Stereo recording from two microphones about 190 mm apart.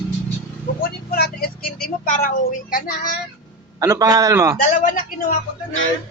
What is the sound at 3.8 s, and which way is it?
Speech, 15° right (ahead or behind).